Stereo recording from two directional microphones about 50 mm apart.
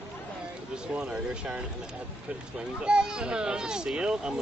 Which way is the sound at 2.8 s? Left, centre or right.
Centre.